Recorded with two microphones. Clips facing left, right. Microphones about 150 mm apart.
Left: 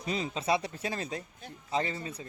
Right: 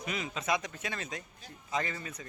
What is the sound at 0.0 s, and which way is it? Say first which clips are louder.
Speech: left 4 dB; 30° left (ahead or behind).